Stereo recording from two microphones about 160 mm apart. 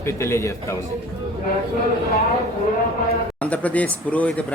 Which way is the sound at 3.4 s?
10° left (ahead or behind).